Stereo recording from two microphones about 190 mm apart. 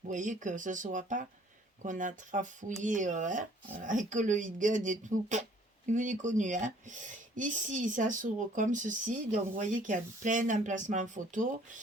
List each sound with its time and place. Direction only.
0.1 s speech: 40° right (ahead or behind)